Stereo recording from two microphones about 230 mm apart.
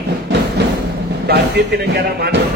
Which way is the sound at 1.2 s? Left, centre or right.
Right.